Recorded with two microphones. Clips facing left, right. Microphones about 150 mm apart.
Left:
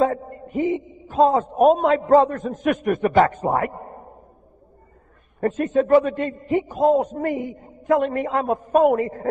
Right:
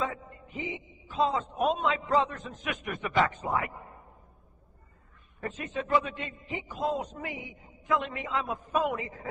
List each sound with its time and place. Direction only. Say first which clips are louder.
0.0 s a man's voice: left 13 dB; 50° left (ahead or behind)
5.4 s a man's voice: left 15 dB; 50° left (ahead or behind)